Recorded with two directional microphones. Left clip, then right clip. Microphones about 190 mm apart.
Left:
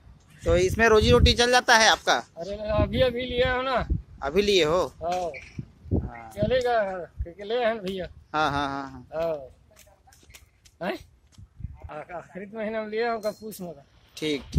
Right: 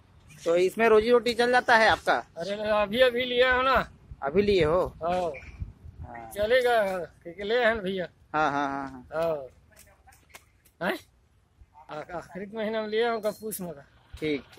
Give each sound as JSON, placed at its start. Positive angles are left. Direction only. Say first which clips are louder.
{"t": 0.4, "sound": "speech", "louder": "left 2 dB", "side_deg": 10}
{"t": 2.3, "sound": "speech", "louder": "right 1 dB", "side_deg": -5}
{"t": 4.2, "sound": "speech", "louder": "left 1 dB", "side_deg": 15}
{"t": 5.0, "sound": "speech", "louder": "even", "side_deg": -5}
{"t": 6.3, "sound": "speech", "louder": "right 1 dB", "side_deg": 0}
{"t": 8.3, "sound": "speech", "louder": "left 1 dB", "side_deg": 10}
{"t": 9.1, "sound": "speech", "louder": "even", "side_deg": 0}
{"t": 10.8, "sound": "speech", "louder": "right 1 dB", "side_deg": -5}
{"t": 14.1, "sound": "speech", "louder": "left 1 dB", "side_deg": 15}